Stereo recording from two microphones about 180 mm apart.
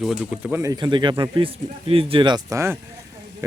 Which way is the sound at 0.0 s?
5° right (ahead or behind).